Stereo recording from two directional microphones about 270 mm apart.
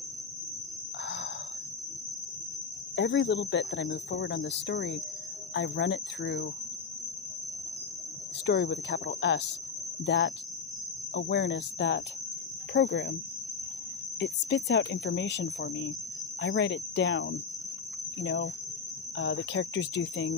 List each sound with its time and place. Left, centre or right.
1.0 s a sound: left
3.0 s speech: left
8.5 s speech: left
14.2 s speech: left
18.2 s cricket: left
19.1 s speech: left